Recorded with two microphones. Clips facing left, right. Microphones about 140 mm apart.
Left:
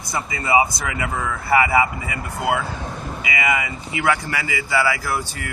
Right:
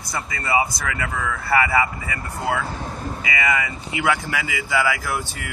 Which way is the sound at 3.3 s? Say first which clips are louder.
Left 1 dB; 10° left (ahead or behind).